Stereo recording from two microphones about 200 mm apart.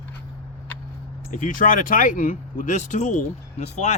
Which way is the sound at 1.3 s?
40° left (ahead or behind).